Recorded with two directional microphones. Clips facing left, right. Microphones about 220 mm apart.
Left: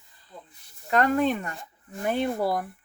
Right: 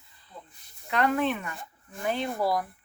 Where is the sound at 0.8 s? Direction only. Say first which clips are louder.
Left 3 dB; 45° left (ahead or behind).